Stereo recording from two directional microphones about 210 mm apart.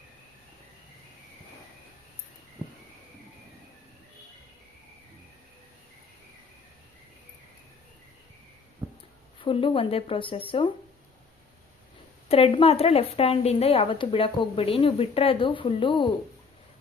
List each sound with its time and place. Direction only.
9.4 s a woman's voice: 25° left (ahead or behind)
12.3 s a woman's voice: 25° left (ahead or behind)